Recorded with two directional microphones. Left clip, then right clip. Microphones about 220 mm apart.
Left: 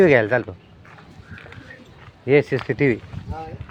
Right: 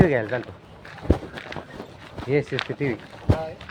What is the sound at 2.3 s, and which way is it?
Speech, 45° left (ahead or behind).